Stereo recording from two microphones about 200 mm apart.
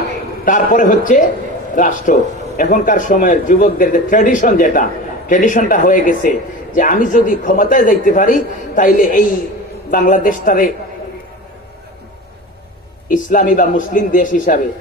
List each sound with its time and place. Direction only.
0.5 s a man's voice: 40° left (ahead or behind)
13.1 s a man's voice: 40° left (ahead or behind)